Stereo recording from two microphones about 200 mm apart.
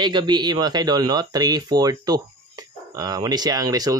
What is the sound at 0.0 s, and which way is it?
Speech, 25° right (ahead or behind).